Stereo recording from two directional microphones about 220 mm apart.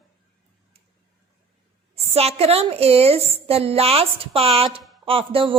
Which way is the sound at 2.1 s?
25° right (ahead or behind).